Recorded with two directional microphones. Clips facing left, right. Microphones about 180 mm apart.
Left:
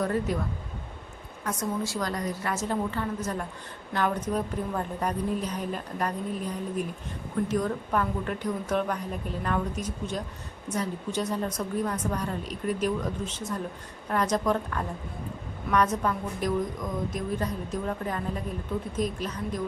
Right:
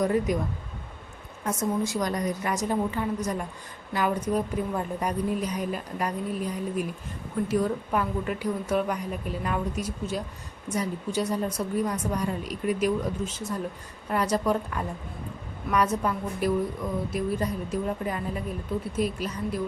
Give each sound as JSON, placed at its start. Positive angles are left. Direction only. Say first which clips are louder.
{"t": 0.0, "sound": "a woman's voice", "louder": "right 3 dB", "side_deg": -15}
{"t": 1.5, "sound": "a woman's voice", "louder": "right 3 dB", "side_deg": -20}